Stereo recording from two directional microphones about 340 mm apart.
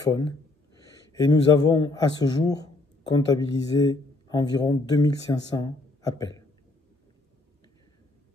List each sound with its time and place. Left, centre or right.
0.0 s a man's voice: centre